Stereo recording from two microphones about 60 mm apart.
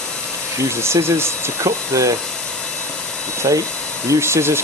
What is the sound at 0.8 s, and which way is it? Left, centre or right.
Speech, right.